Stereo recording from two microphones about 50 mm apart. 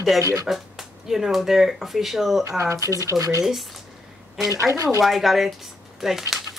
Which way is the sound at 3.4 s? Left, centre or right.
Centre.